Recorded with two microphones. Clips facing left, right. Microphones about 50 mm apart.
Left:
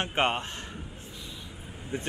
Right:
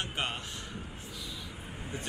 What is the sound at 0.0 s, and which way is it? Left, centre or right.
Speech, left.